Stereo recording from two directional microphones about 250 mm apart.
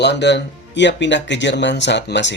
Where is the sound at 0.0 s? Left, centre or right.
Left.